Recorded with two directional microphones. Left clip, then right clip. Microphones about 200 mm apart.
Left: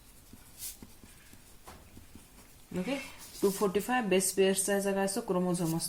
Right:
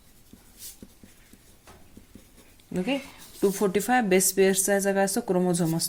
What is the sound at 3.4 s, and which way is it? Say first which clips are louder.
A woman's voice: right 5 dB; 40° right (ahead or behind).